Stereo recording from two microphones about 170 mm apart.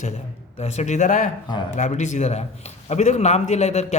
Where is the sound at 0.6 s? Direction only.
40° left (ahead or behind).